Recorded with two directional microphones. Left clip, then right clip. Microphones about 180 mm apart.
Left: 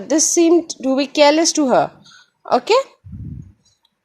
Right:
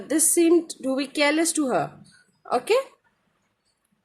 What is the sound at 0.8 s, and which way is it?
Speech, 25° left (ahead or behind).